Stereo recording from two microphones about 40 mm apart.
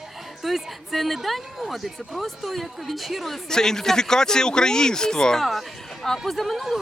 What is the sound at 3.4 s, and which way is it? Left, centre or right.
Speech, centre.